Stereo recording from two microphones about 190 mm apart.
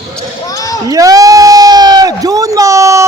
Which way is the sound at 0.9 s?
20° right (ahead or behind).